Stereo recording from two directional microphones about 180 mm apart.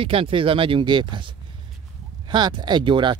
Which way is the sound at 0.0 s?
30° right (ahead or behind).